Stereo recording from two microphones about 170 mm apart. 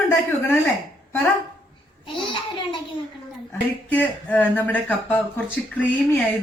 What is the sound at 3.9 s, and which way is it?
Speech, 10° left (ahead or behind).